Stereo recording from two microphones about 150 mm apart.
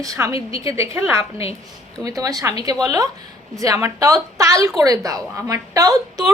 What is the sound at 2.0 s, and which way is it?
A woman's voice, 25° right (ahead or behind).